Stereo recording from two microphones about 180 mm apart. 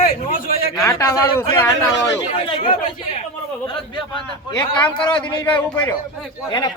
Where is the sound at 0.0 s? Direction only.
50° left (ahead or behind).